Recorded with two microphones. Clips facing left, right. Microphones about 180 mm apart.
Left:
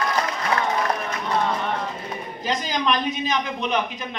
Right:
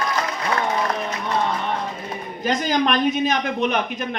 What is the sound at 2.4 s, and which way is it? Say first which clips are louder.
A man's voice: right 5 dB; 55° right (ahead or behind).